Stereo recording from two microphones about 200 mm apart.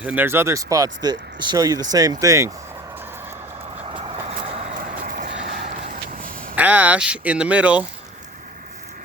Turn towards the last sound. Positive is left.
turn(degrees=-5)  # may be behind; listen again after turning